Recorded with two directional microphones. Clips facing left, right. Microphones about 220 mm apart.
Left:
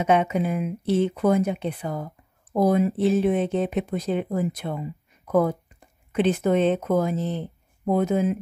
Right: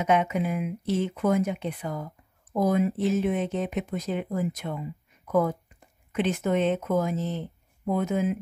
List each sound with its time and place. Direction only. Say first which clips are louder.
0.0 s speech: left 3 dB; 30° left (ahead or behind)